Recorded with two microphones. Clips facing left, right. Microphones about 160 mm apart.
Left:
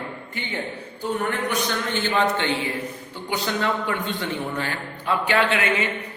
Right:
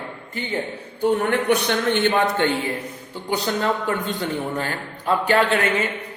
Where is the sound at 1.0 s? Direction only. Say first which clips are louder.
Right 6 dB; 65° right (ahead or behind).